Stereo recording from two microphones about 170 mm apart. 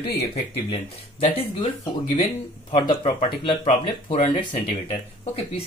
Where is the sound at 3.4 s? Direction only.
45° left (ahead or behind).